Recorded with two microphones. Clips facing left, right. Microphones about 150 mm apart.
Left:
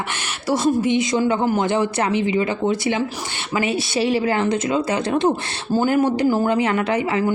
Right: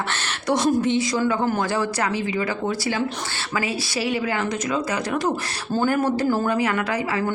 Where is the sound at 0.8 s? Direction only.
15° left (ahead or behind).